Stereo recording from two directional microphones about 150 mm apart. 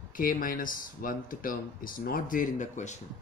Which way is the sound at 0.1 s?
65° left (ahead or behind).